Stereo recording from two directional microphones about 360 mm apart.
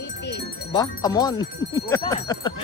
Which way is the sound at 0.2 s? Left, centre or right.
Left.